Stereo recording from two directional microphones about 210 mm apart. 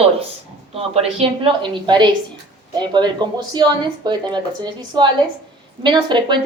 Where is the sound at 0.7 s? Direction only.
30° right (ahead or behind).